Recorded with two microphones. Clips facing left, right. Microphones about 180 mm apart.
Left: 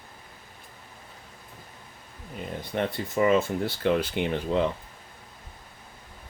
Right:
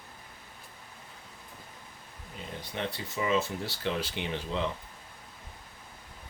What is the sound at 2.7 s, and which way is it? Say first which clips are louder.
Speech: left 8 dB; 50° left (ahead or behind).